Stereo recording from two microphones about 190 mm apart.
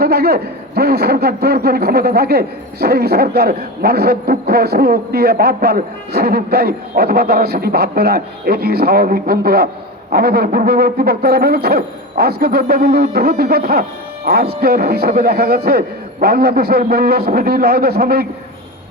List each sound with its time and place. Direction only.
0.0 s a man's voice: 55° right (ahead or behind)